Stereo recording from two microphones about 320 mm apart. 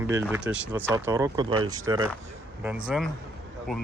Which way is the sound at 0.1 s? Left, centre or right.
Centre.